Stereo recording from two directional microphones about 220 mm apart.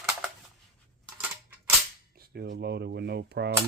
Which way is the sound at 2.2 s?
50° right (ahead or behind).